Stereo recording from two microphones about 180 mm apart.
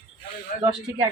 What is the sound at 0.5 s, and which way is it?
Speech, 45° left (ahead or behind).